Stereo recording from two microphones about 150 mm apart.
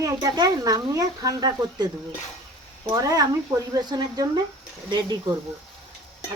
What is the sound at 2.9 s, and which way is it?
Speech, 25° right (ahead or behind).